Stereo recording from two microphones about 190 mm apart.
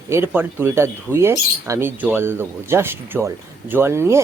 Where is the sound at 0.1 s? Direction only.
15° right (ahead or behind).